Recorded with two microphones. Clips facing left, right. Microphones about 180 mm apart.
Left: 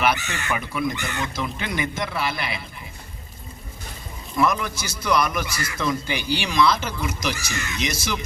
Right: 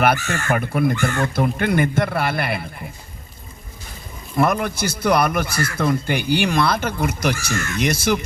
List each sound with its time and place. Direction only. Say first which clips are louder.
0.3 s speech: right 6 dB; 55° right (ahead or behind)
4.4 s speech: right 3 dB; 55° right (ahead or behind)
7.5 s speech: right 6 dB; 15° left (ahead or behind)
7.8 s speech: right 8 dB; 60° right (ahead or behind)